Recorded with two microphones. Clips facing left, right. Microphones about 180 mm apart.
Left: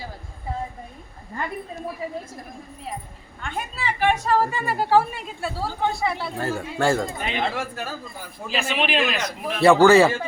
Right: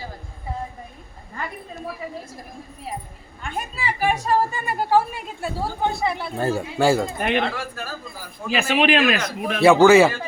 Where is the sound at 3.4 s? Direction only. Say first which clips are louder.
Right 1 dB; 10° right (ahead or behind).